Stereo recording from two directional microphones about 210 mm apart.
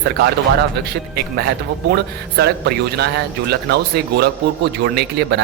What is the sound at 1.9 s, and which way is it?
Speech, 50° right (ahead or behind).